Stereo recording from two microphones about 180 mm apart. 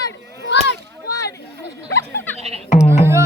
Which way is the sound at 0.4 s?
75° left (ahead or behind).